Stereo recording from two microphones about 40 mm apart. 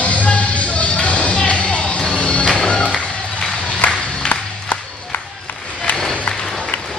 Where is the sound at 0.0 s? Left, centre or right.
Left.